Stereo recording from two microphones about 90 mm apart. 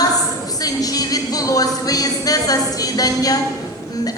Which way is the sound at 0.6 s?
45° left (ahead or behind).